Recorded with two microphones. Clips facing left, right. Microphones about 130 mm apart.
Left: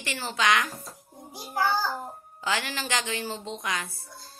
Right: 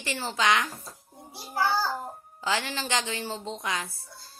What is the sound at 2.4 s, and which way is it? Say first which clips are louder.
Speech: right 1 dB; 30° right (ahead or behind).